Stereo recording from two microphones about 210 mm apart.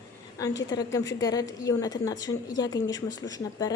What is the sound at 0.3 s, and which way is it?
A woman's voice, 15° left (ahead or behind).